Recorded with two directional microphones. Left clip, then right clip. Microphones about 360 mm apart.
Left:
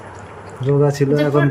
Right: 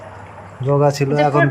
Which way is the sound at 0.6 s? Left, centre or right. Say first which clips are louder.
Right 1 dB; centre.